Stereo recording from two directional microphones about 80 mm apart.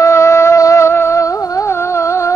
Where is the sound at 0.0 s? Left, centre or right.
Left.